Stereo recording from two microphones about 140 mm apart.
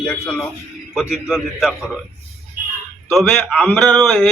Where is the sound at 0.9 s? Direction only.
5° right (ahead or behind).